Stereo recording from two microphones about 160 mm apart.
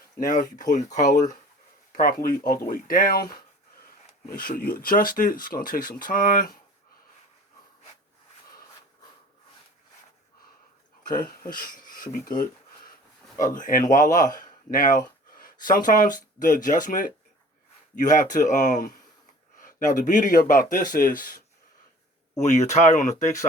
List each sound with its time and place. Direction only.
0.2 s speech: 55° left (ahead or behind)
1.9 s speech: 65° left (ahead or behind)
4.3 s speech: 60° left (ahead or behind)
11.1 s speech: 60° left (ahead or behind)
22.4 s speech: 45° left (ahead or behind)